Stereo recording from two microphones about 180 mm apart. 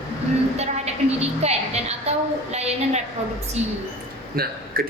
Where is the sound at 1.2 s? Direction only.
35° right (ahead or behind).